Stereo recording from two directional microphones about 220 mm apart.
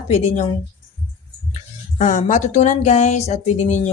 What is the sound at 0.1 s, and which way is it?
Speech, 30° left (ahead or behind).